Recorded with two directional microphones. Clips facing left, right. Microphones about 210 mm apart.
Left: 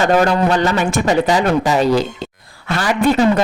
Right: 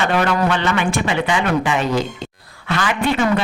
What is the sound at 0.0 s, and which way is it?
Speech, 40° left (ahead or behind).